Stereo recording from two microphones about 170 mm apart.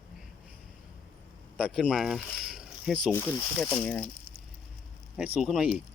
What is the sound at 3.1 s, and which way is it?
Speech, 15° left (ahead or behind).